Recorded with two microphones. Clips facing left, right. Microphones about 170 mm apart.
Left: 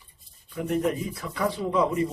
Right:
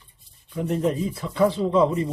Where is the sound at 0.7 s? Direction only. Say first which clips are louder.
Right 2 dB; 25° right (ahead or behind).